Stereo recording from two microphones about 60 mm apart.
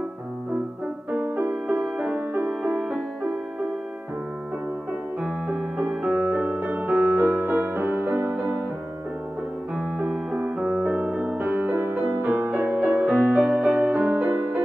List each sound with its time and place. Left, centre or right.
1.2 s music: right
1.5 s music: centre
2.0 s music: right
2.6 s music: centre
5.2 s piano: centre
6.1 s music: right
9.8 s keyboard: centre
10.8 s music: right